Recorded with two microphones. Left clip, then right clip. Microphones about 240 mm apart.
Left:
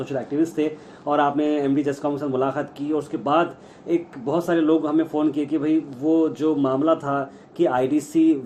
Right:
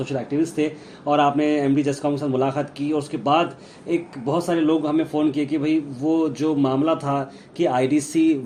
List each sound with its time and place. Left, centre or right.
0.0 s a man's voice: centre